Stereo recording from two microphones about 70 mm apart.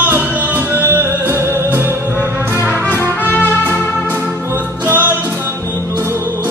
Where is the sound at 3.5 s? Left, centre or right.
Right.